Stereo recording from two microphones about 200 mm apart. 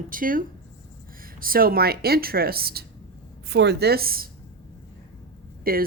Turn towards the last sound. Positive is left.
turn(degrees=-50)  # may be behind; listen again after turning